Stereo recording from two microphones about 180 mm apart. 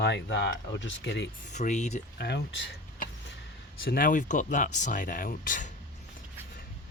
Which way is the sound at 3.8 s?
55° left (ahead or behind).